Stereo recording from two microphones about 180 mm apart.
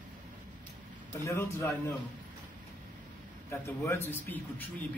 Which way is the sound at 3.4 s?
15° left (ahead or behind).